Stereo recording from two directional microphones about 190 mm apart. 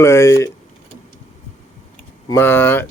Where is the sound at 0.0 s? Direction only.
15° left (ahead or behind).